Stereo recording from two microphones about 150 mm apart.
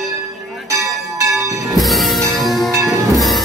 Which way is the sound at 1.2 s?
20° right (ahead or behind).